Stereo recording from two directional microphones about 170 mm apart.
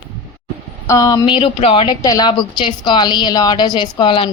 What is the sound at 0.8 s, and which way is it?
A woman's voice, 20° left (ahead or behind).